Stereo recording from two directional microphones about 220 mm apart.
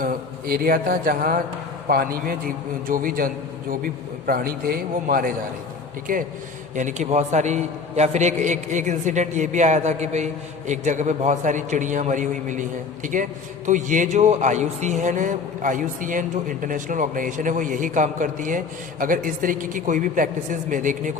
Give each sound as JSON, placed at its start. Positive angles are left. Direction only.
{"t": 0.0, "sound": "a man's voice", "side_deg": -40}